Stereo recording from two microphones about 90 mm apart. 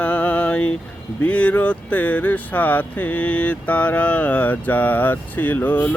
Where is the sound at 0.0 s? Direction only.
20° left (ahead or behind).